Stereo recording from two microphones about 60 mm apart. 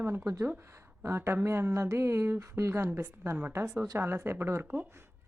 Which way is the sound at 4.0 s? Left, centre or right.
Right.